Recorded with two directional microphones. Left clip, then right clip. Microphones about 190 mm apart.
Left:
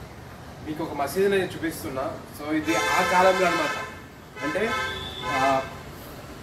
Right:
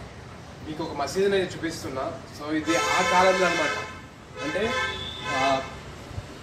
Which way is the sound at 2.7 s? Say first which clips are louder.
Even; 15° left (ahead or behind).